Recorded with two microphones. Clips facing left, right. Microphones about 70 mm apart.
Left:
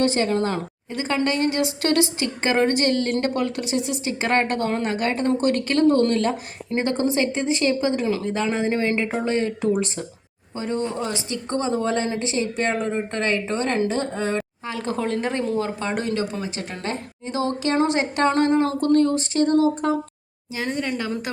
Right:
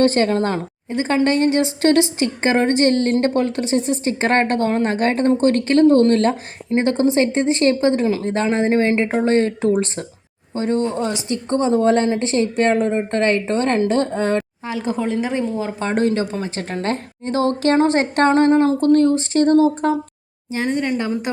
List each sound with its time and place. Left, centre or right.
0.0 s a woman's voice: right
0.5 s speech: right
7.0 s a woman's voice: right
7.3 s a woman's voice: right
10.5 s a woman's voice: right
14.7 s a woman's voice: centre
15.8 s a woman's voice: right
18.3 s speech: right